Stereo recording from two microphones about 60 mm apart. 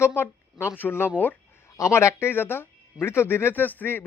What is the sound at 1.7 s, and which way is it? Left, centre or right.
Speech, left.